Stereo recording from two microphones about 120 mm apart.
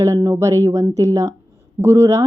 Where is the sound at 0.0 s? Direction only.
30° right (ahead or behind).